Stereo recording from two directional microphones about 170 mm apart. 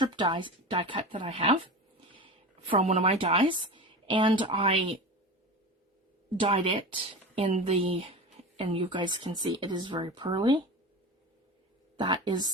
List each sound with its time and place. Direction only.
0.0 s speech: 30° right (ahead or behind)
6.4 s speech: 30° right (ahead or behind)
11.9 s speech: 25° right (ahead or behind)